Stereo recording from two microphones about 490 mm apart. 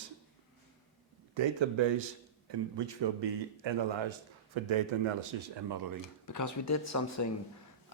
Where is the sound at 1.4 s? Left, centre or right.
Right.